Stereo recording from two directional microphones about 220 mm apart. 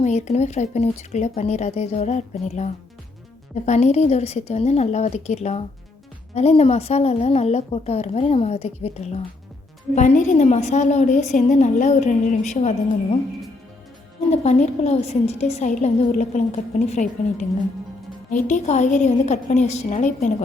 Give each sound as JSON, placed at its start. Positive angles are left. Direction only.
{"t": 0.0, "sound": "a woman's voice", "side_deg": 30}
{"t": 14.3, "sound": "a woman's voice", "side_deg": 30}